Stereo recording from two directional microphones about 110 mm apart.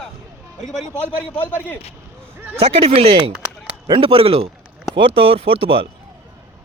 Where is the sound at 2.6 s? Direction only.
65° right (ahead or behind).